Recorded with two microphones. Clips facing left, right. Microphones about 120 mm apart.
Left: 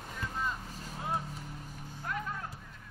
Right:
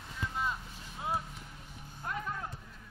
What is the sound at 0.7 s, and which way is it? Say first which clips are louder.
Vehicle: left 5 dB; 40° left (ahead or behind).